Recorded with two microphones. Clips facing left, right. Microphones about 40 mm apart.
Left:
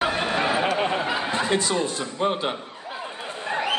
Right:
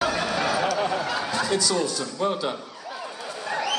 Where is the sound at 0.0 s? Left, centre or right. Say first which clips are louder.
Left 1 dB; left.